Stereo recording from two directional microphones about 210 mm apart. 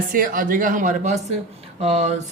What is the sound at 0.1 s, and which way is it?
Speech, 40° right (ahead or behind).